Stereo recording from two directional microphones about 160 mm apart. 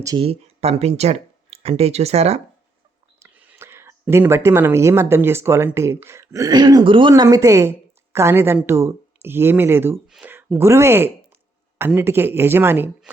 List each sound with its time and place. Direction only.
0.2 s speech: 40° right (ahead or behind)
3.2 s speech: 15° right (ahead or behind); by 7.1 s 30° right (ahead or behind)
7.1 s a woman's voice: 20° right (ahead or behind)